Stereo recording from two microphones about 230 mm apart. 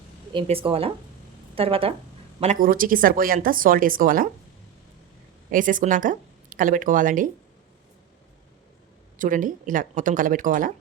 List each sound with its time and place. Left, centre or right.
0.3 s a woman's voice: right
5.5 s speech: right
9.1 s a woman's voice: right